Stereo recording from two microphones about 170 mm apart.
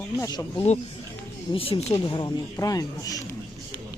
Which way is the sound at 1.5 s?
35° left (ahead or behind).